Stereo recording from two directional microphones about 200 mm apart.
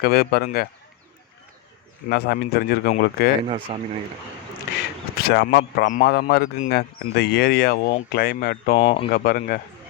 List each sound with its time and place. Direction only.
0.0 s speech: 50° left (ahead or behind)
2.0 s a man's voice: 55° left (ahead or behind)
3.4 s speech: 30° right (ahead or behind)
5.2 s a man's voice: 60° left (ahead or behind)
5.9 s speech: 45° left (ahead or behind)
8.8 s speech: 25° left (ahead or behind)
9.1 s speech: 45° left (ahead or behind)